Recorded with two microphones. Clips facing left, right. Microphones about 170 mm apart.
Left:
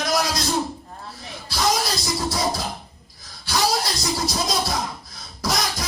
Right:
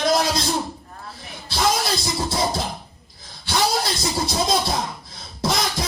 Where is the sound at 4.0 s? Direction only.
25° right (ahead or behind).